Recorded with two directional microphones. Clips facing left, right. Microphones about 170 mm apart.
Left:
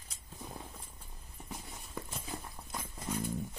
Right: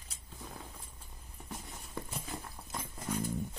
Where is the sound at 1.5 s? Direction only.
Centre (ahead or behind).